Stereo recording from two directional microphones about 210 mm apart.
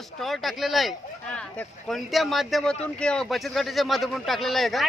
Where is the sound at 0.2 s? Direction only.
Centre (ahead or behind).